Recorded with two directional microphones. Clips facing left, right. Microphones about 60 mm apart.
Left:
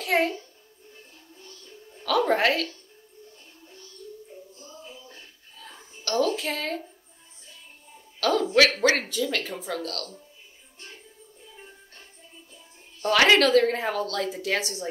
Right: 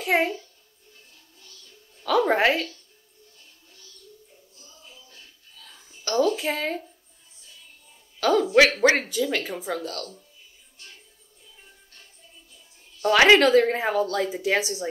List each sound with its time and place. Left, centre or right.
0.0 s a child's voice: centre
0.9 s music: left
2.0 s speech: centre
3.6 s music: left
4.6 s a sound: left
6.0 s speech: centre
8.2 s speech: centre
11.5 s music: left
13.0 s speech: centre